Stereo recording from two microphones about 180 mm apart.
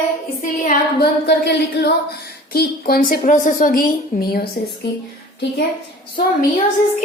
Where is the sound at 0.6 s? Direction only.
55° left (ahead or behind).